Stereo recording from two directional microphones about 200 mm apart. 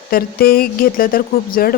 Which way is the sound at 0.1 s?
45° left (ahead or behind).